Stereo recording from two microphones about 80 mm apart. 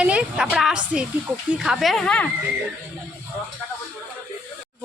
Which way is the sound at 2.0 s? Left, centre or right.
Centre.